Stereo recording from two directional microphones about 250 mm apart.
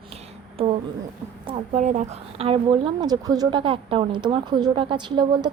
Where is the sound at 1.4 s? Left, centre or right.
Right.